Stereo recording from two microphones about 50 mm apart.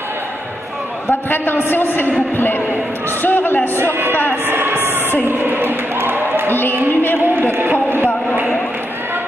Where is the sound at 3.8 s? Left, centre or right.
Right.